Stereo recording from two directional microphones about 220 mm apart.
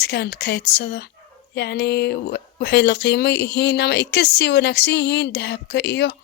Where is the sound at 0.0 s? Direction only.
50° left (ahead or behind).